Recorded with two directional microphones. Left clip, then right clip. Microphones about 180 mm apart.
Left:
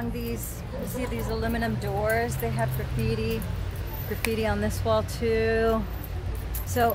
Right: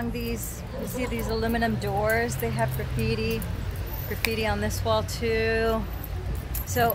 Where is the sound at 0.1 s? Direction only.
25° right (ahead or behind).